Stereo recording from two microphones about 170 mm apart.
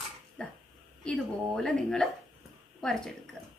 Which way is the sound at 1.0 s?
5° left (ahead or behind).